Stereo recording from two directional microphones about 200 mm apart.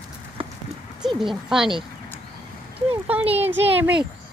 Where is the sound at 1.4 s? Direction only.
Centre (ahead or behind).